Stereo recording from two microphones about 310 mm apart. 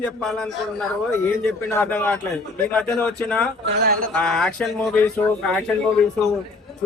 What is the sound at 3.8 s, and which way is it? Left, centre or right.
Speech, right.